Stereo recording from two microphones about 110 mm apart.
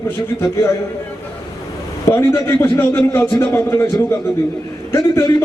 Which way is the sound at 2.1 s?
25° left (ahead or behind).